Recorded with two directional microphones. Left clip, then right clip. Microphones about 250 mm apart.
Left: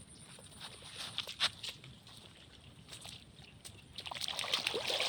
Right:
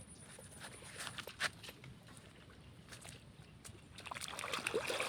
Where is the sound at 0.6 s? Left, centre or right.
Right.